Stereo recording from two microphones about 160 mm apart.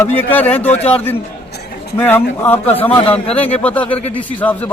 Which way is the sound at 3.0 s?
35° left (ahead or behind).